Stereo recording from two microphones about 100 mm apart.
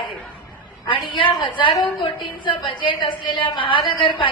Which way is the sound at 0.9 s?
55° left (ahead or behind).